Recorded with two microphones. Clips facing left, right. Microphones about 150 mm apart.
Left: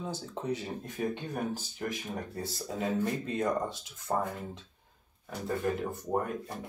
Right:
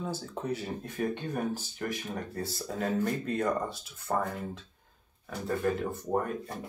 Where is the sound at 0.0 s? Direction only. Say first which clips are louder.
Right 1 dB; 15° left (ahead or behind).